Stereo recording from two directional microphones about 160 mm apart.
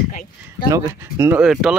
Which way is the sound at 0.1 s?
65° left (ahead or behind).